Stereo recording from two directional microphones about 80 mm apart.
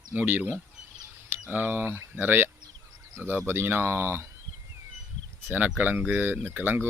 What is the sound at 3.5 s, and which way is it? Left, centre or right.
Speech, right.